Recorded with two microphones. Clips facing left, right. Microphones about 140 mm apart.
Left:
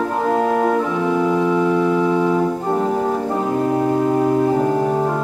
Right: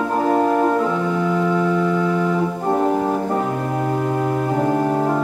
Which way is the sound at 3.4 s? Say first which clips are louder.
Left 3 dB; 20° left (ahead or behind).